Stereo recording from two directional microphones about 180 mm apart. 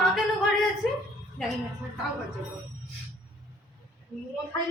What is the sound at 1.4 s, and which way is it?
Speech, 5° left (ahead or behind).